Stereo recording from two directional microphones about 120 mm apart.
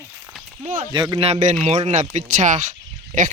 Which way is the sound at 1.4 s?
70° right (ahead or behind).